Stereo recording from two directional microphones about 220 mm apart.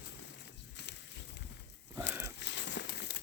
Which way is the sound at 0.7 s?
50° left (ahead or behind).